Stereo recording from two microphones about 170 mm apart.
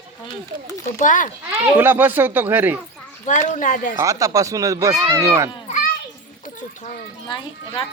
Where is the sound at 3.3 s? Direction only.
45° left (ahead or behind).